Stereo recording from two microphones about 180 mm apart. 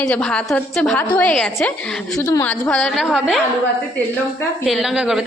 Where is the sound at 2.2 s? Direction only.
15° left (ahead or behind).